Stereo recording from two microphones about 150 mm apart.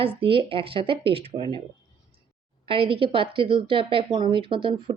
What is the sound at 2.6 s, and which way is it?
Speech, 35° right (ahead or behind).